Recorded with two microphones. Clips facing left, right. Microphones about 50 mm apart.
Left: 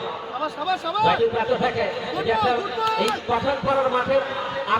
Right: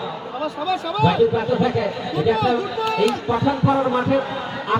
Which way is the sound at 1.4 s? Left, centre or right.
Centre.